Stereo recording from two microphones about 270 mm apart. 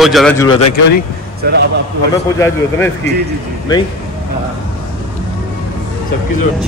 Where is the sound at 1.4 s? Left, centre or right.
Right.